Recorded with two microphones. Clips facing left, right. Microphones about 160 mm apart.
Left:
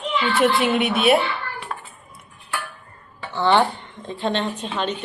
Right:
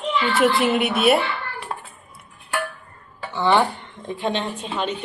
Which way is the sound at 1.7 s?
25° right (ahead or behind).